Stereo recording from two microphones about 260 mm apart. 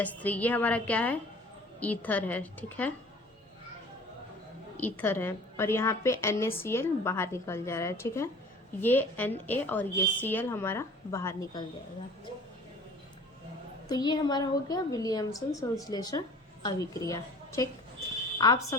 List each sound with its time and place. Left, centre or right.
0.0 s a woman's voice: centre
4.8 s a woman's voice: centre
13.8 s a woman's voice: centre